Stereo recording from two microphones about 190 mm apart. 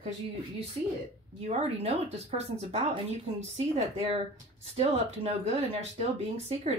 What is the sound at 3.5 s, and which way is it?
Speech, 35° right (ahead or behind).